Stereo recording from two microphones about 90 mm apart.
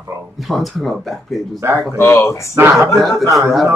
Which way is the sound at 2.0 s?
30° left (ahead or behind).